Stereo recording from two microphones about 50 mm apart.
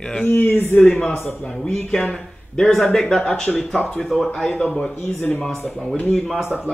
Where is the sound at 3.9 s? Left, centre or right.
Centre.